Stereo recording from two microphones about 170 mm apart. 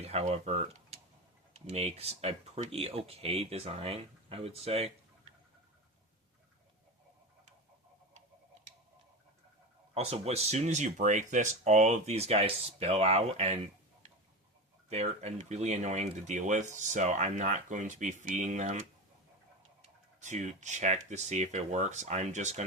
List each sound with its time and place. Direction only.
0.0 s speech: 35° right (ahead or behind)
9.9 s speech: 35° right (ahead or behind)
14.8 s speech: 40° right (ahead or behind)
20.2 s speech: 45° right (ahead or behind)